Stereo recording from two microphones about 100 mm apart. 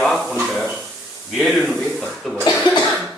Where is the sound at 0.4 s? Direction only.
Centre (ahead or behind).